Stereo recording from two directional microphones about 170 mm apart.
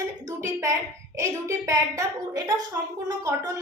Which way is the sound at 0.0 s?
20° right (ahead or behind).